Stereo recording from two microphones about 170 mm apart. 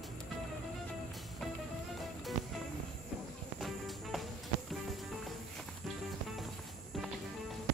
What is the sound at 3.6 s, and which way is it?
Music, centre (ahead or behind).